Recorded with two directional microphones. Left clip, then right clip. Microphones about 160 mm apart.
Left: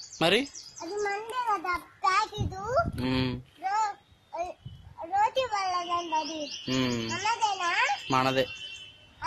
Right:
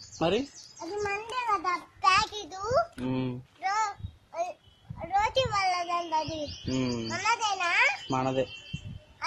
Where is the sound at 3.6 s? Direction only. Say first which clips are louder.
Even; 25° right (ahead or behind).